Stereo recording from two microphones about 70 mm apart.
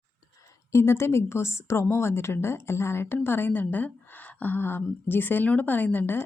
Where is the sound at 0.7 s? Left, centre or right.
Left.